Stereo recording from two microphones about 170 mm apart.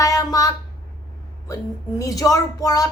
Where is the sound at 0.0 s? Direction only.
20° left (ahead or behind).